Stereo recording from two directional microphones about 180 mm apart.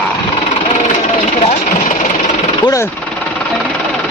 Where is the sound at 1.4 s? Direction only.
40° left (ahead or behind).